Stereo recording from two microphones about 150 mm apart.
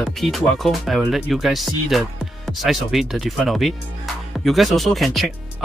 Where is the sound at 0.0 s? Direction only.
Centre (ahead or behind).